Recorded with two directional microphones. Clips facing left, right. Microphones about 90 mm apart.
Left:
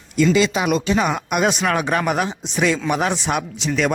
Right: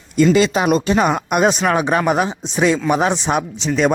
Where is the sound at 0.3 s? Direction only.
40° right (ahead or behind).